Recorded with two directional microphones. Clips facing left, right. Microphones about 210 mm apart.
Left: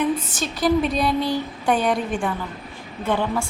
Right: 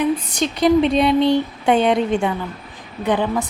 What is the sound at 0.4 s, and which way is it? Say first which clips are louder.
A woman's voice: right 5 dB; 20° right (ahead or behind).